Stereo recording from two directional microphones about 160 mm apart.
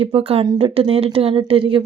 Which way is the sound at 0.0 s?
35° right (ahead or behind).